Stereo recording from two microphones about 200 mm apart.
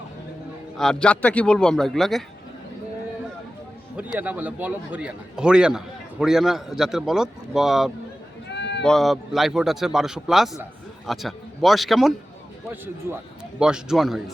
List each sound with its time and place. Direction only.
0.8 s a man's voice: 5° left (ahead or behind)
4.2 s a man's voice: 10° right (ahead or behind)
8.4 s sheep: 60° left (ahead or behind)
8.8 s a man's voice: centre (ahead or behind)